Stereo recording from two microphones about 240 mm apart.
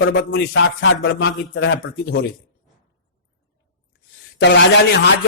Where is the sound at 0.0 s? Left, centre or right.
Left.